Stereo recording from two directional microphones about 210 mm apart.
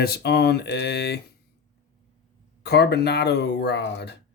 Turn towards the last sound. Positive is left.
turn(degrees=55)  # may be behind; listen again after turning